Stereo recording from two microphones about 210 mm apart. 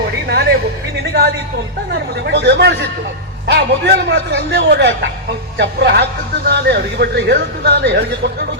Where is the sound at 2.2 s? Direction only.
55° right (ahead or behind).